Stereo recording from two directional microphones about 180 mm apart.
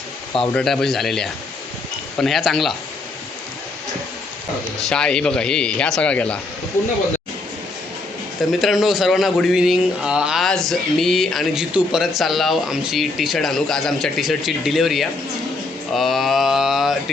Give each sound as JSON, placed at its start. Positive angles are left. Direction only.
{"t": 0.5, "sound": "a man's voice", "side_deg": 0}
{"t": 4.8, "sound": "a man's voice", "side_deg": 5}
{"t": 8.4, "sound": "a man's voice", "side_deg": 0}